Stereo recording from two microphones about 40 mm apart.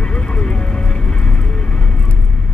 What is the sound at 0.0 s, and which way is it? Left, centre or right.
Vehicle, left.